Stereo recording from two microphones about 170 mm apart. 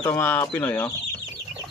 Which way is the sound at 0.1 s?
10° left (ahead or behind).